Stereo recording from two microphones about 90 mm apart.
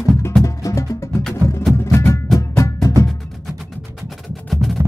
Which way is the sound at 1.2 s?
5° left (ahead or behind).